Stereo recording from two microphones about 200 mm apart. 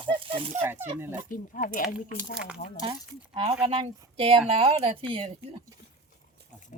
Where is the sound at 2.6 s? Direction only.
30° left (ahead or behind).